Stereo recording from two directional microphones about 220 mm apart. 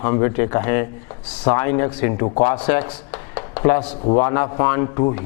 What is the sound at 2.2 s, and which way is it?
Speech, 25° left (ahead or behind).